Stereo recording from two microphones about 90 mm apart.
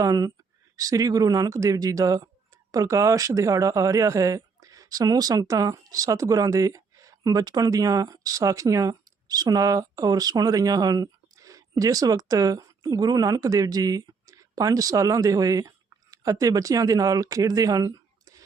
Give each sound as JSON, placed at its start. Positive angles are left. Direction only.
{"t": 0.0, "sound": "speech", "side_deg": -45}